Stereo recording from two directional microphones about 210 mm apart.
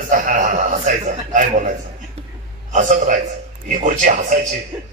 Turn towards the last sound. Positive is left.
turn(degrees=-35)  # may be behind; listen again after turning